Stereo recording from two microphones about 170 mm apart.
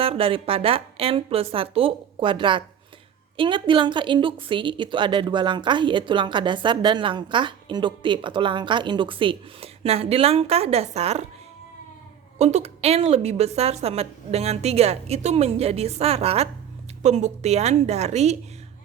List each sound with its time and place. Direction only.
0.0 s a woman's voice: 35° right (ahead or behind)
12.4 s a woman's voice: 40° right (ahead or behind)